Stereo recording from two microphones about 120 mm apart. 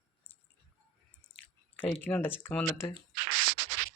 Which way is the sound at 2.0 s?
15° left (ahead or behind).